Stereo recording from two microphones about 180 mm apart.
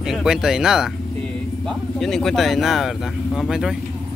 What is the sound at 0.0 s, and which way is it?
Speech, 5° right (ahead or behind).